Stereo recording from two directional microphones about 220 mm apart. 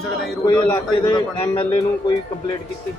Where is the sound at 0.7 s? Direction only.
20° left (ahead or behind).